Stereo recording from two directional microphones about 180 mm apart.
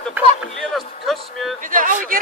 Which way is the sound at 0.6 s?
Centre (ahead or behind).